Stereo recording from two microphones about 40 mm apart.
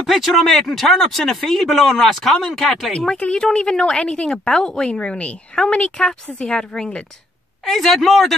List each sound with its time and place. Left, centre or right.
0.1 s speech: centre
3.3 s a woman's voice: centre
7.6 s speech: centre